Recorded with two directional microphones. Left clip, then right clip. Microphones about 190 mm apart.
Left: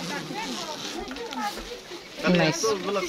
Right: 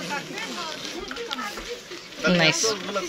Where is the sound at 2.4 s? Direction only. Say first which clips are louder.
Right 4 dB; 10° left (ahead or behind).